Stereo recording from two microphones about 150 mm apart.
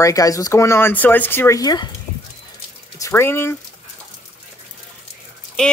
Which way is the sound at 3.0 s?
15° left (ahead or behind).